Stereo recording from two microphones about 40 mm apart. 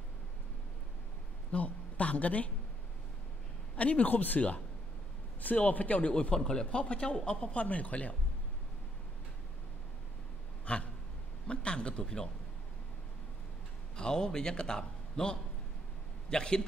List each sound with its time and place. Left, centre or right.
1.5 s a woman's voice: left
3.7 s speech: left
5.7 s speech: left
6.3 s speech: centre
7.6 s speech: left
10.6 s a sound: left
11.4 s speech: left
13.9 s a man's voice: centre